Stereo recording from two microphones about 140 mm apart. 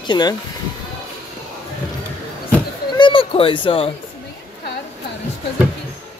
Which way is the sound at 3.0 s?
40° left (ahead or behind).